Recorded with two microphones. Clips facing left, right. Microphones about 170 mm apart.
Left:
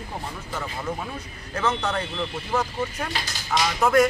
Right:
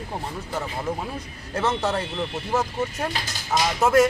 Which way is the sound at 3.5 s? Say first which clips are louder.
Right 1 dB; 25° right (ahead or behind).